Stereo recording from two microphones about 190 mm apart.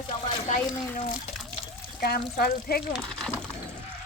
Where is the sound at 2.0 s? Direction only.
55° left (ahead or behind).